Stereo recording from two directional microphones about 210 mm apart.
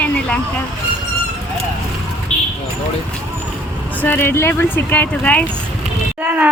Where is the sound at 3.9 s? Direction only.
10° left (ahead or behind).